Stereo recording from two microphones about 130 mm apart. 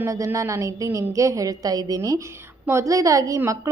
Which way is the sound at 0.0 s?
20° right (ahead or behind).